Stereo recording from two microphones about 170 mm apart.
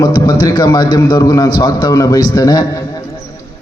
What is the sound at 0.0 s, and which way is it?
A man's voice, 25° left (ahead or behind).